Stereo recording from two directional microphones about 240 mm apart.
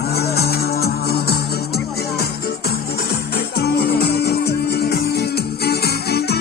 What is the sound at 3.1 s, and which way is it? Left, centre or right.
Music, left.